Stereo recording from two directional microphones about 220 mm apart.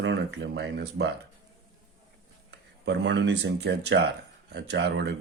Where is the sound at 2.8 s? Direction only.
50° right (ahead or behind).